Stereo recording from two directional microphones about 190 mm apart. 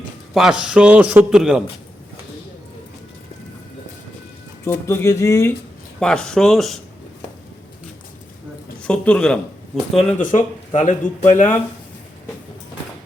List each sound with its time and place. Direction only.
0.3 s a man's voice: 5° right (ahead or behind)
4.6 s speech: 15° left (ahead or behind)
6.0 s a man's voice: 5° left (ahead or behind)
8.8 s a man's voice: 5° left (ahead or behind)
10.1 s speech: 40° left (ahead or behind)